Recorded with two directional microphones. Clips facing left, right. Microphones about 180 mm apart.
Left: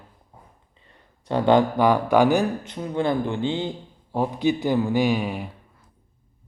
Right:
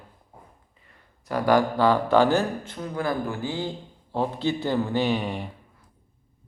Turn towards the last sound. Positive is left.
turn(degrees=5)  # may be behind; listen again after turning